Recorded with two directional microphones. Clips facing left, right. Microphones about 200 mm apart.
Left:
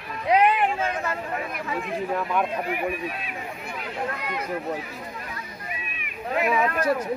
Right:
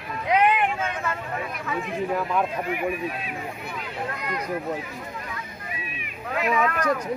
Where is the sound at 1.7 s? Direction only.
Centre (ahead or behind).